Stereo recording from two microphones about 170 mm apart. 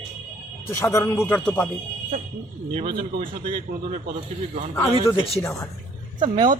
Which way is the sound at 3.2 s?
40° right (ahead or behind).